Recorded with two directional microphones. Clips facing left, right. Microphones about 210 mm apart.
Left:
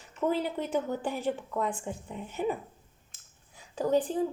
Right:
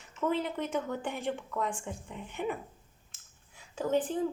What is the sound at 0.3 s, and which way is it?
A woman's voice, 35° left (ahead or behind).